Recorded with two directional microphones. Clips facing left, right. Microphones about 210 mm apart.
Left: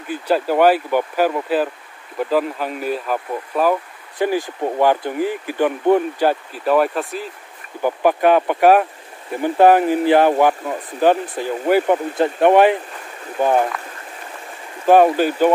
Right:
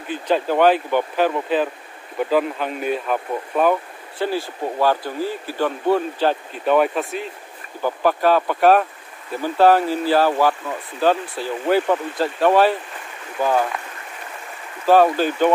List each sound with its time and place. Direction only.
0.1 s speech: 10° left (ahead or behind)
4.2 s speech: 15° left (ahead or behind)
7.8 s speech: 15° left (ahead or behind)
14.9 s speech: 15° left (ahead or behind)